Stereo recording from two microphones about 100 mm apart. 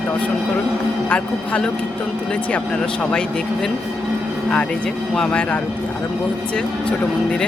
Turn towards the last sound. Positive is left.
turn(degrees=10)  # may be behind; listen again after turning